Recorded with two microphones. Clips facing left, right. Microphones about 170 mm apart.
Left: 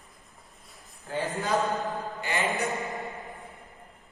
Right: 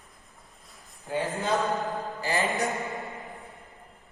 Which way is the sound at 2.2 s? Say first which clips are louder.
Right 2 dB; 35° right (ahead or behind).